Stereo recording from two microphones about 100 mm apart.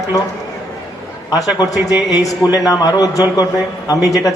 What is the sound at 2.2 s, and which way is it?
A man's voice, 40° left (ahead or behind).